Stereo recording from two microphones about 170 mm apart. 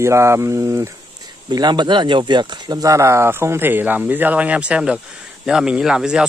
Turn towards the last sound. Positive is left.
turn(degrees=-5)  # may be behind; listen again after turning